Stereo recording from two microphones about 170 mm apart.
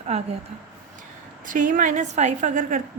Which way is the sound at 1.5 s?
50° right (ahead or behind).